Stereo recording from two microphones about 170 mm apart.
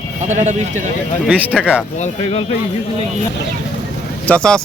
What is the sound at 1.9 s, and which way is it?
Speech, 40° left (ahead or behind).